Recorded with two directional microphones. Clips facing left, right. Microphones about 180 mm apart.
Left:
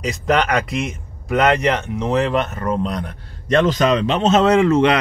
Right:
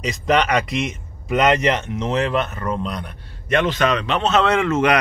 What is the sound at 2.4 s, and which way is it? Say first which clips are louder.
Speech: left 3 dB; 40° left (ahead or behind).